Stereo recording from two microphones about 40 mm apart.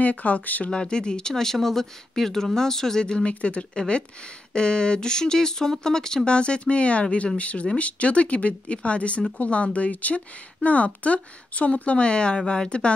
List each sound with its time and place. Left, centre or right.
0.0 s speech: left
0.7 s speech: left
3.3 s speech: left